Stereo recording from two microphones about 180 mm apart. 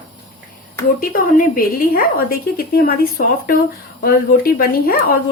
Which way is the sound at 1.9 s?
55° left (ahead or behind).